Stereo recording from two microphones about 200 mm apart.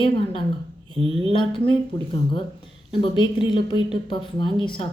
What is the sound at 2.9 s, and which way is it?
A woman's voice, 25° left (ahead or behind).